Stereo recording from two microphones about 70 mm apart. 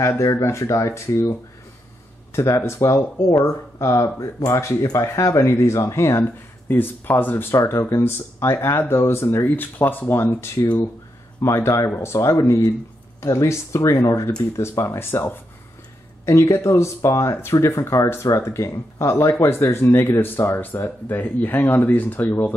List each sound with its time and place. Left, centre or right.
0.2 s speech: left
2.3 s speech: left
6.2 s speech: left
9.6 s speech: left
16.3 s speech: left